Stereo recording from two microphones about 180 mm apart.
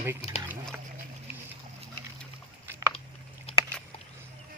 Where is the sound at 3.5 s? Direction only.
35° left (ahead or behind).